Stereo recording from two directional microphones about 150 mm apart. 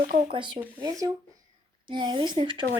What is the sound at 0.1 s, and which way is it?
Speech, 35° right (ahead or behind).